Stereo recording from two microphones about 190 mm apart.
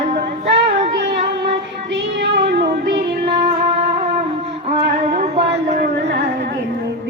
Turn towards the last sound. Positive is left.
turn(degrees=-35)  # may be behind; listen again after turning